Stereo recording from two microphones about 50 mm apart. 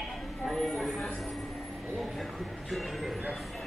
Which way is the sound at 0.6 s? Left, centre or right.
Centre.